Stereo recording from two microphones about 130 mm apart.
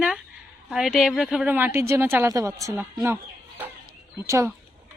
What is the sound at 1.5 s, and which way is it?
Speech, 15° right (ahead or behind).